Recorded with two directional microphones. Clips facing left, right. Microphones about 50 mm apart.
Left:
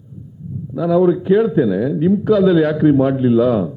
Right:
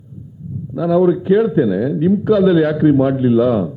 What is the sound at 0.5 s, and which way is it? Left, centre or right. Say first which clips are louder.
A man's voice: even; centre.